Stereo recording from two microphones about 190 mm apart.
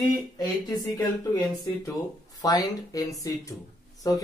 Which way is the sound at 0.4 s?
20° left (ahead or behind).